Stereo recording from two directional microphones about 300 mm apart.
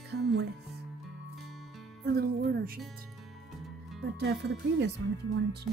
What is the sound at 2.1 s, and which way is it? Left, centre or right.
Speech, right.